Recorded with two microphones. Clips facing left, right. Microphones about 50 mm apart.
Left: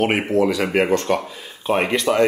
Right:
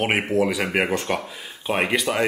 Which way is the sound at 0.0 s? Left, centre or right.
Centre.